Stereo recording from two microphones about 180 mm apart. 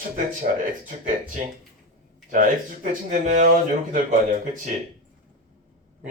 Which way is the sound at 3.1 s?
45° right (ahead or behind).